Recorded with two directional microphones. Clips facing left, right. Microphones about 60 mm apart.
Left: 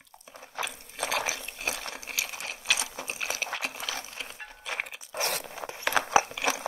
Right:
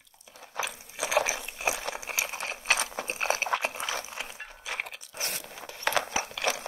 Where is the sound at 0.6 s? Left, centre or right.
Centre.